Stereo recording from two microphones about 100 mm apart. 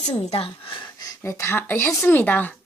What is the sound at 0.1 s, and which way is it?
Speech, 80° left.